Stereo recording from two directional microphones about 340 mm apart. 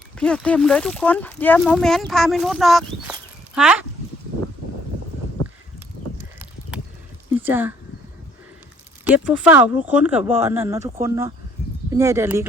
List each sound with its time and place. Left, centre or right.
0.2 s speech: centre
7.3 s a sound: centre
9.0 s speech: centre
10.2 s speech: centre